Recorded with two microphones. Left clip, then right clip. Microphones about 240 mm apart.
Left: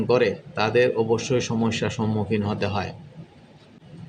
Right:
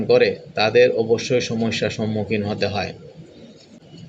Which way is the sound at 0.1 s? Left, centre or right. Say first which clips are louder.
Right 5 dB; centre.